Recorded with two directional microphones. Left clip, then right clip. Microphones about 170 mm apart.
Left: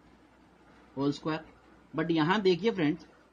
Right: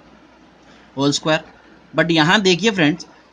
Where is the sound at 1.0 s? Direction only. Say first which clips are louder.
Right 14 dB; 45° right (ahead or behind).